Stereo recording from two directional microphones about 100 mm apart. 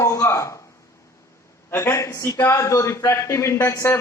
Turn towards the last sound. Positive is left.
turn(degrees=30)  # may be behind; listen again after turning